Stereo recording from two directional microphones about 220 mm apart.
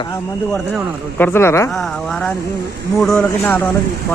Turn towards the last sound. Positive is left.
turn(degrees=5)  # may be behind; listen again after turning